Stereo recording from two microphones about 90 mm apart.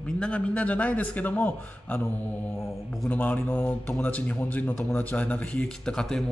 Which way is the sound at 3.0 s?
20° left (ahead or behind).